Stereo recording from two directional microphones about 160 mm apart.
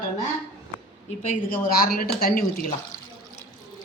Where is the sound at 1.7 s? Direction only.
65° left (ahead or behind).